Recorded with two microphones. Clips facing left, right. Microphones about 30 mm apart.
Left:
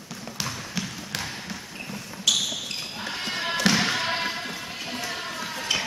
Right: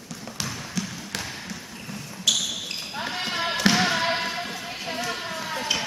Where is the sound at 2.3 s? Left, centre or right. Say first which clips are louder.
Even; centre.